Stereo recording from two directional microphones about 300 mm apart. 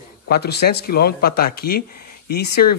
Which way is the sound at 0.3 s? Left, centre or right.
Left.